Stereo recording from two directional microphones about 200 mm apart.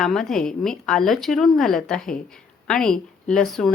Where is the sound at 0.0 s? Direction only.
Centre (ahead or behind).